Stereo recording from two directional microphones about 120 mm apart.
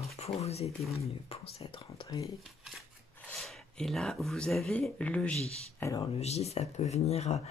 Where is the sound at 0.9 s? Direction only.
55° left (ahead or behind).